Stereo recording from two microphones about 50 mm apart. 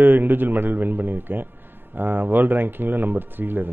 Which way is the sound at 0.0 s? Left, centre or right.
Right.